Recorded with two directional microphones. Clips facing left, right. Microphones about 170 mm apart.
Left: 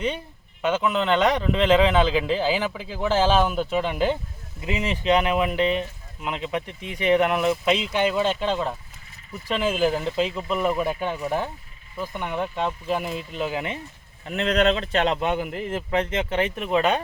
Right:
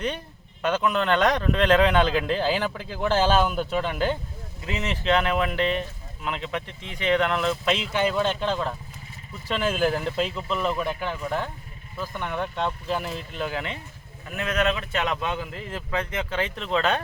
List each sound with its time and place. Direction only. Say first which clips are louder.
0.6 s speech: left 1 dB; 5° left (ahead or behind)
14.3 s speech: left 4 dB; 30° left (ahead or behind); by 17.0 s 15° left (ahead or behind)